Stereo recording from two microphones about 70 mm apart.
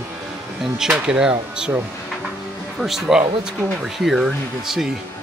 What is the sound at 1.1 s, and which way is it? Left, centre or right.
Speech, centre.